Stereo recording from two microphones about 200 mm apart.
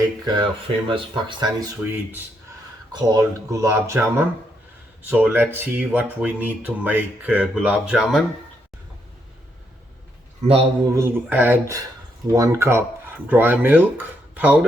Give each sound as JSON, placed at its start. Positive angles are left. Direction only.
{"t": 0.0, "sound": "speech", "side_deg": -20}
{"t": 10.4, "sound": "speech", "side_deg": -30}
{"t": 10.9, "sound": "speech", "side_deg": -10}